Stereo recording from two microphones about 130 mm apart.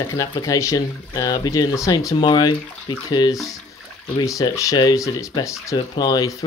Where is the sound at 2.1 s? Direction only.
35° left (ahead or behind).